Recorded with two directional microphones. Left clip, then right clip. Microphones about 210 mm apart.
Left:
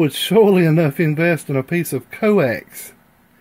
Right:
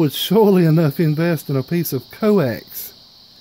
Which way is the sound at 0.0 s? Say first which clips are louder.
Left 1 dB; 15° right (ahead or behind).